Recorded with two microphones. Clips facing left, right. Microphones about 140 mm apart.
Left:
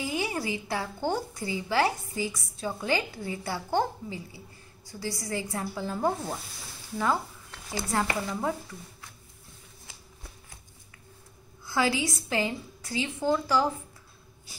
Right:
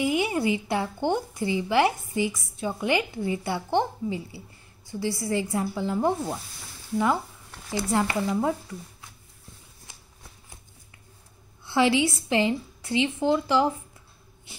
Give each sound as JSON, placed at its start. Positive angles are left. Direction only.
{"t": 0.0, "sound": "a woman's voice", "side_deg": -20}
{"t": 8.0, "sound": "speech", "side_deg": -15}
{"t": 11.6, "sound": "a woman's voice", "side_deg": -25}